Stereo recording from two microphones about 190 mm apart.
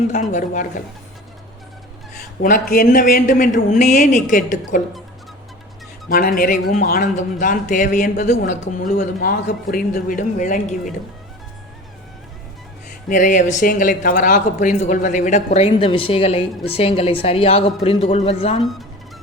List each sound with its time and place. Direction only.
0.1 s speech: 40° left (ahead or behind)
2.4 s a man's voice: 45° left (ahead or behind)
6.1 s a man's voice: 50° left (ahead or behind)
13.1 s a man's voice: 40° left (ahead or behind)
15.5 s a woman's voice: 30° left (ahead or behind)
18.6 s speech: centre (ahead or behind)